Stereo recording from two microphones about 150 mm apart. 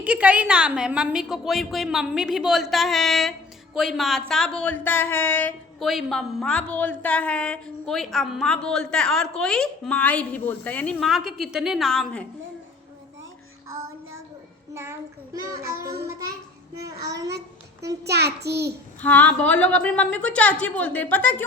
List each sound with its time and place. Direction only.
0.0 s a woman's voice: 10° right (ahead or behind); by 5.5 s 10° left (ahead or behind)
5.8 s a woman's voice: centre (ahead or behind)
11.0 s a woman's voice: centre (ahead or behind)
14.7 s child singing: 15° right (ahead or behind)
18.0 s child singing: 90° right
19.0 s a woman's voice: 10° left (ahead or behind)